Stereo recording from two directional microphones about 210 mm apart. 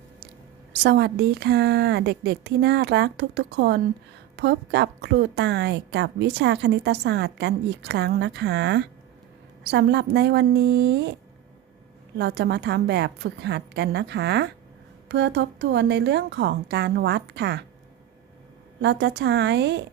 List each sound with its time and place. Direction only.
0.8 s a woman's voice: 50° right (ahead or behind)
12.1 s a woman's voice: 55° right (ahead or behind)
18.8 s a woman's voice: 55° right (ahead or behind)